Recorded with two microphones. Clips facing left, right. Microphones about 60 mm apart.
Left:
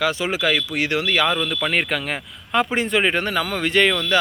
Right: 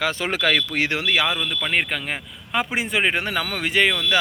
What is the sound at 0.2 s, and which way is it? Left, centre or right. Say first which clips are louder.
Speech: even; right.